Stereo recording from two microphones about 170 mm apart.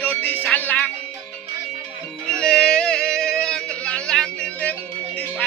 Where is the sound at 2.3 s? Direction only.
5° left (ahead or behind).